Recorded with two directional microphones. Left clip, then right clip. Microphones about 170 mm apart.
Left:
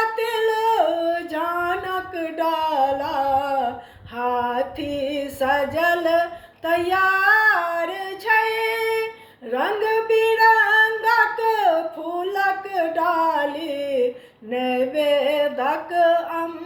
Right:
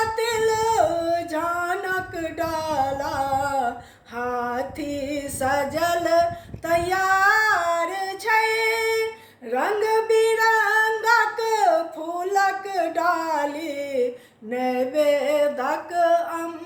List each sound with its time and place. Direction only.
0.2 s singing: 25° right (ahead or behind)
4.2 s music: 20° right (ahead or behind)
6.7 s female singing: 20° right (ahead or behind)
9.5 s a sound: 20° right (ahead or behind)
14.5 s music: 20° right (ahead or behind)